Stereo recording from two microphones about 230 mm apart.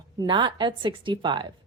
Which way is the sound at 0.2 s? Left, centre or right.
Centre.